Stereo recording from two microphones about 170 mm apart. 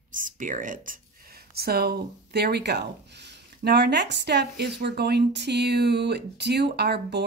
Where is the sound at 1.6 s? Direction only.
65° right (ahead or behind).